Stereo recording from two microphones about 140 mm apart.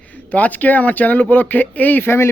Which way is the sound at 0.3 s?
10° left (ahead or behind).